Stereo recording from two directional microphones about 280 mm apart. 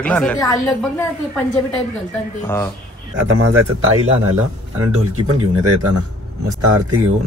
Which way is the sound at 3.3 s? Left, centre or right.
Right.